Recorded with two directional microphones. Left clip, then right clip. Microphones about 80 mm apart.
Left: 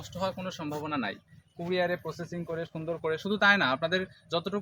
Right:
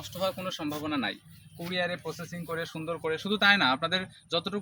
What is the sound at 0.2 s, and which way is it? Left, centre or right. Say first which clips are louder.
Speech: right 2 dB; left.